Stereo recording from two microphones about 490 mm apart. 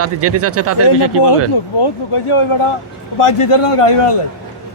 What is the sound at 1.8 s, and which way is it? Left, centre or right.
Speech, left.